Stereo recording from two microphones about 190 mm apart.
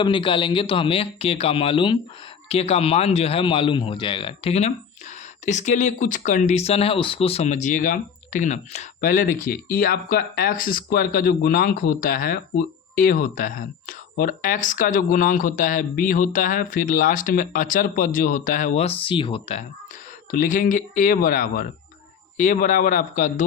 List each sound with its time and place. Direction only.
0.0 s speech: 25° left (ahead or behind)
20.3 s speech: 45° left (ahead or behind)